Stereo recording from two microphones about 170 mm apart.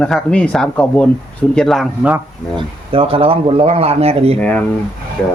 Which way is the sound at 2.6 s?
35° right (ahead or behind).